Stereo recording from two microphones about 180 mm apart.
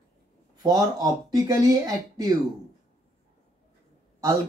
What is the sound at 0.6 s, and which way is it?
Speech, 20° right (ahead or behind).